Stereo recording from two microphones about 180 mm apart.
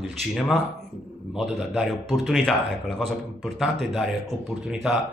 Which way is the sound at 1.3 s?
Centre (ahead or behind).